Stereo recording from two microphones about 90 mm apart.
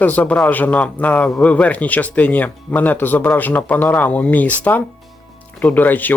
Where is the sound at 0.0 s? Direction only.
15° left (ahead or behind).